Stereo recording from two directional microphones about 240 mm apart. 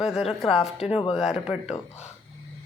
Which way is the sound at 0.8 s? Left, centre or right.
Left.